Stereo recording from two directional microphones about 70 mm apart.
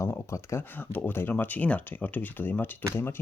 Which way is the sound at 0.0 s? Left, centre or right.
Left.